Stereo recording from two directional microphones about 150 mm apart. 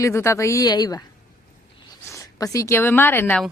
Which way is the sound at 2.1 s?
20° left (ahead or behind).